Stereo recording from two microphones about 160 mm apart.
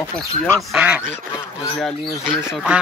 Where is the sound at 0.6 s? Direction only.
5° right (ahead or behind).